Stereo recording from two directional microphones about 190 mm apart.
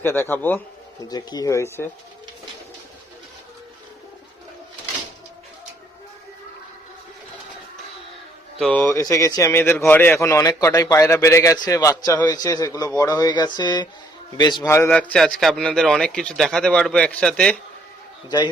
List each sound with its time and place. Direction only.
0.0 s a man's voice: 10° left (ahead or behind)
8.5 s speech: centre (ahead or behind)
8.9 s a man's voice: 15° left (ahead or behind)
13.0 s a sound: 20° left (ahead or behind)
14.8 s speech: 5° left (ahead or behind)